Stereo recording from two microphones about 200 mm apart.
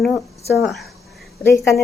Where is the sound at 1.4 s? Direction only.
15° left (ahead or behind).